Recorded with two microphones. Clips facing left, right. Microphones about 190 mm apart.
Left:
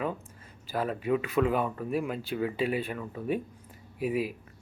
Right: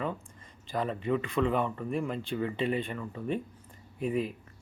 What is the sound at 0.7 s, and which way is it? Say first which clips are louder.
Speech: left 2 dB; 5° left (ahead or behind).